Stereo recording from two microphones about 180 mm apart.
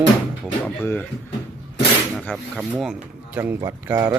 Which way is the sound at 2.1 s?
Centre (ahead or behind).